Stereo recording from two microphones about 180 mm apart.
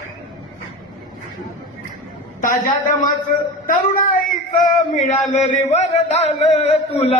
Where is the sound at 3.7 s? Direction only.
50° left (ahead or behind).